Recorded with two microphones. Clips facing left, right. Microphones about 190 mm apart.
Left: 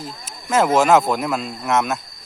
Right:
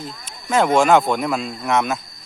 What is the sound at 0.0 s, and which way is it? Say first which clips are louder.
Speech: even; centre (ahead or behind).